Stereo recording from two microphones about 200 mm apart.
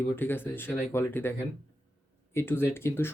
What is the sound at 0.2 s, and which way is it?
Speech, 10° left (ahead or behind).